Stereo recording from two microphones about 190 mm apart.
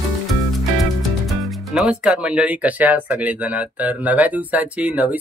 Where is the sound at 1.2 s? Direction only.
Centre (ahead or behind).